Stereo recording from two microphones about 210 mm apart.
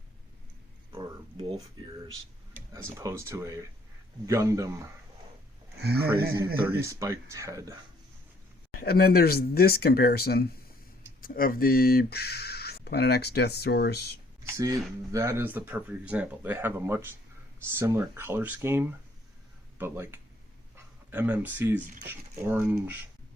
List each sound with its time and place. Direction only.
2.7 s speech: 15° right (ahead or behind)
5.8 s speech: 50° right (ahead or behind)
6.8 s speech: 15° right (ahead or behind)
8.8 s speech: 45° left (ahead or behind)
14.4 s speech: 15° right (ahead or behind)